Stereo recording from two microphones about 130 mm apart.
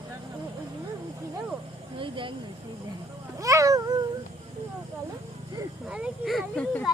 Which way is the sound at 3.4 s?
25° right (ahead or behind).